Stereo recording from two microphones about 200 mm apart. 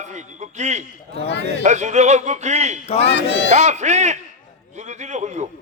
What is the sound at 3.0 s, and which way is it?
Speech, 60° left (ahead or behind).